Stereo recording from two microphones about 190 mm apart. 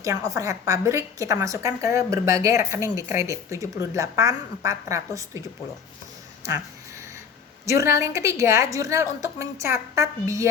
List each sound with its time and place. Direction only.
0.0 s a woman's voice: 15° right (ahead or behind)
7.6 s a woman's voice: 15° right (ahead or behind)